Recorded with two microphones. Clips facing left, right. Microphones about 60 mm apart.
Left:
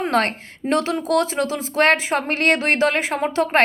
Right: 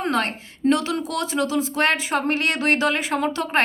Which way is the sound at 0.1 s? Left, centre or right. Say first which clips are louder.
Left 3 dB; left.